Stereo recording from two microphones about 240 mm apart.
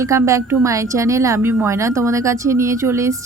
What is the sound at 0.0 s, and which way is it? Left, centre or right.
Speech, centre.